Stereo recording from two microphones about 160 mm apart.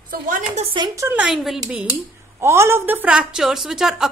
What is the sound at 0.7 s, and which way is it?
Speech, 20° right (ahead or behind).